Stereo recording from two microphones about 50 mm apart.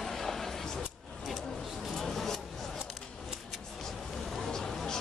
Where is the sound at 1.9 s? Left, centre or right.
Centre.